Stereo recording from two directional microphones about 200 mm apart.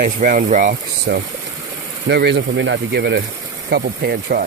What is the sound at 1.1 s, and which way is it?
Speech, 55° right (ahead or behind).